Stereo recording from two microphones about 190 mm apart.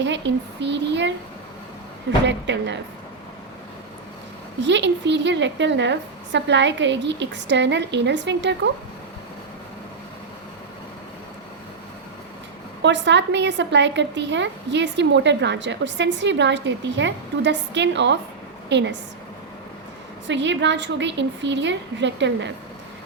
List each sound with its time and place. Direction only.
0.0 s speech: 65° right (ahead or behind)
4.6 s speech: 70° right (ahead or behind)
12.8 s speech: 70° right (ahead or behind)
20.2 s speech: 70° right (ahead or behind)